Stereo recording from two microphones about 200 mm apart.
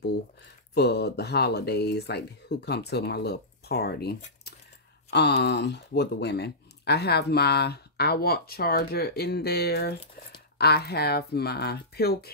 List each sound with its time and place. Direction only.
0.7 s speech: 55° left (ahead or behind)